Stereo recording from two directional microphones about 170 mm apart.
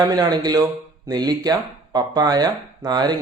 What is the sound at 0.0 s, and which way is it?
Speech, 20° right (ahead or behind).